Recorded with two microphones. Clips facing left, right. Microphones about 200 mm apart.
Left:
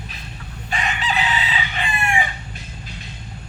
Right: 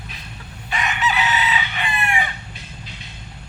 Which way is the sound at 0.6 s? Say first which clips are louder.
Right 2 dB; 30° left (ahead or behind).